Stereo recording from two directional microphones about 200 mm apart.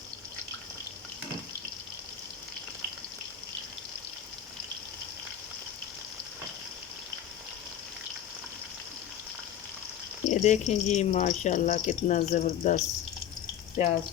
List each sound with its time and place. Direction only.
10.2 s speech: 35° left (ahead or behind)
13.8 s speech: 30° left (ahead or behind)